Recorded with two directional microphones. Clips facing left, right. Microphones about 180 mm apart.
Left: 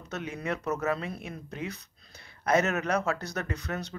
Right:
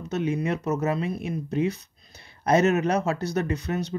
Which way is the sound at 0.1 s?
25° right (ahead or behind).